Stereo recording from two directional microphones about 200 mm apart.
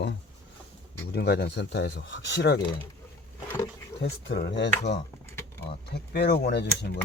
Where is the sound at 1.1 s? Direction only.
55° left (ahead or behind).